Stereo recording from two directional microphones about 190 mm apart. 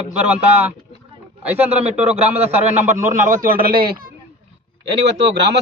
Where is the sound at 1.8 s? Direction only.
35° right (ahead or behind); by 4.1 s 50° right (ahead or behind).